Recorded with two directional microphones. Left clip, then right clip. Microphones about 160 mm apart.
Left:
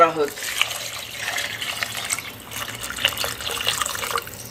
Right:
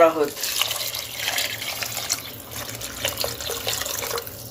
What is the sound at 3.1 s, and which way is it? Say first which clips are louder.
Water: even; 25° right (ahead or behind).